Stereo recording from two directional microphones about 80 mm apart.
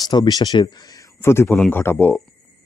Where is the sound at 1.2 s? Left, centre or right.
Left.